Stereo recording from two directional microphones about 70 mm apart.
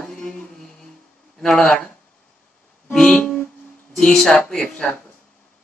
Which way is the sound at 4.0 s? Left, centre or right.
Centre.